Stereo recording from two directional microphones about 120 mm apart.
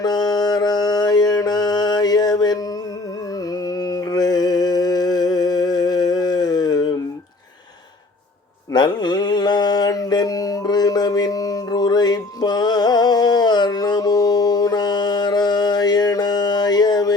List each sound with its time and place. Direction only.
0.0 s music: 35° left (ahead or behind)
3.5 s mantra: 30° left (ahead or behind)
8.7 s mantra: 35° left (ahead or behind)